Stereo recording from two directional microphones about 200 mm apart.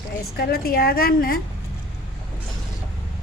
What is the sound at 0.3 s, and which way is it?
A woman's voice, 50° left (ahead or behind).